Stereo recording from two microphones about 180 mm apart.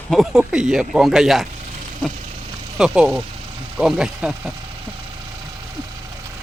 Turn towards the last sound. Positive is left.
turn(degrees=-5)  # may be behind; listen again after turning